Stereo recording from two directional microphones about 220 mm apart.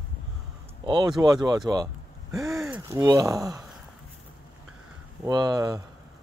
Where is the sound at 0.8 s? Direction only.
20° right (ahead or behind).